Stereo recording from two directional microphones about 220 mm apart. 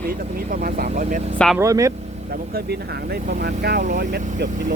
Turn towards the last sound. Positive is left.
turn(degrees=-50)  # may be behind; listen again after turning